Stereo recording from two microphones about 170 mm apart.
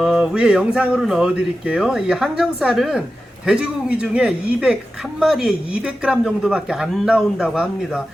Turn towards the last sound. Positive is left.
turn(degrees=0)  # may be behind; listen again after turning